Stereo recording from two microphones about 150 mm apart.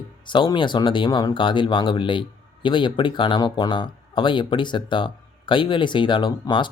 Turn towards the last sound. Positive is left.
turn(degrees=30)  # may be behind; listen again after turning